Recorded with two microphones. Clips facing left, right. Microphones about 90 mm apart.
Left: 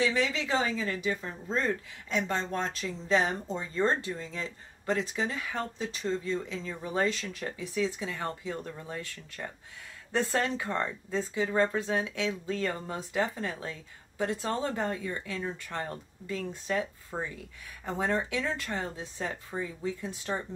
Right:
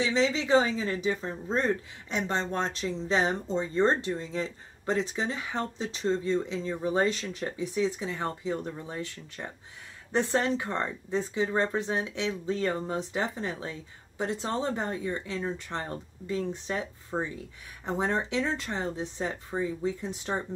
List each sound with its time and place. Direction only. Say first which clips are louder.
0.0 s speech: right 2 dB; 25° right (ahead or behind)